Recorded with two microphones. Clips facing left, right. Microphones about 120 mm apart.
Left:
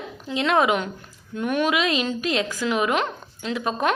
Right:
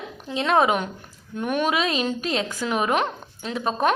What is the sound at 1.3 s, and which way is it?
Speech, 15° right (ahead or behind).